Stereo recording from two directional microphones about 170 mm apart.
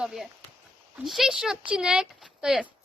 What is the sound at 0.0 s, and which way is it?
Speech, centre (ahead or behind).